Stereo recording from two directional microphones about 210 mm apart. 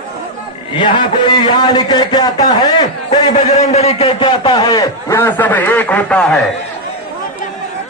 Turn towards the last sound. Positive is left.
turn(degrees=5)  # may be behind; listen again after turning